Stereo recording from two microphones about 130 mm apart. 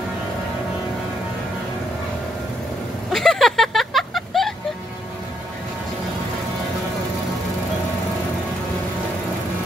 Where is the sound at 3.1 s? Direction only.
5° left (ahead or behind).